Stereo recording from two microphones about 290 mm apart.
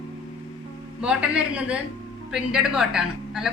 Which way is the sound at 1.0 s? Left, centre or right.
Centre.